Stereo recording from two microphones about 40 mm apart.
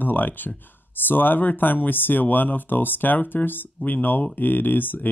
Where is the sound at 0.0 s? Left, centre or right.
Left.